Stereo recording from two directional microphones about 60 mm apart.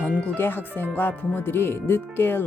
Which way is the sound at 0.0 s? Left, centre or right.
Left.